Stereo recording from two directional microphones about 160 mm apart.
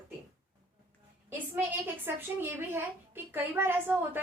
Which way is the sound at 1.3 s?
10° right (ahead or behind).